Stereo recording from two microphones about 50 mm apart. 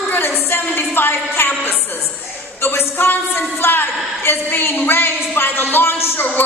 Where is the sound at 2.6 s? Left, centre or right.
Left.